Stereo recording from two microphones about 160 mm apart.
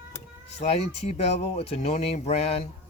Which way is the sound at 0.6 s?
40° left (ahead or behind).